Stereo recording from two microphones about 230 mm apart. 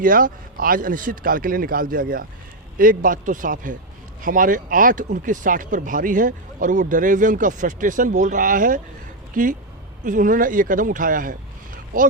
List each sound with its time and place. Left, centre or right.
0.0 s speech: right